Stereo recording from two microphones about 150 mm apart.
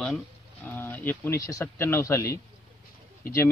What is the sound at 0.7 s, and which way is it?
Speech, 15° left (ahead or behind).